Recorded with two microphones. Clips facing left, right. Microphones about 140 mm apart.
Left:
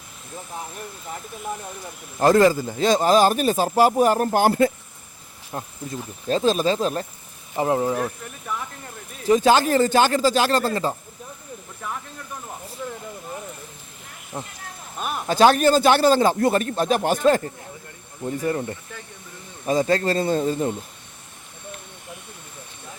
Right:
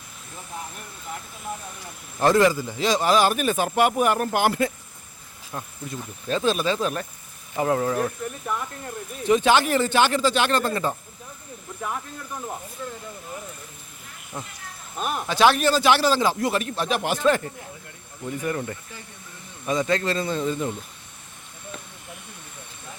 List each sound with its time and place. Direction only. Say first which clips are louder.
2.2 s speech: left 3 dB; 45° left (ahead or behind); by 8.0 s 20° left (ahead or behind)
9.2 s speech: left 2 dB; 35° left (ahead or behind)
14.3 s speech: left 3 dB; 25° left (ahead or behind)
15.3 s speech: left 4 dB; 40° left (ahead or behind)